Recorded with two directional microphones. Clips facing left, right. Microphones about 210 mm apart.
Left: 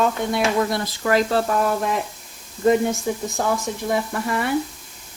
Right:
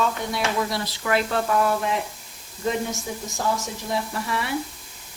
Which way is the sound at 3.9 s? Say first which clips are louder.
Left 4 dB; 50° left (ahead or behind).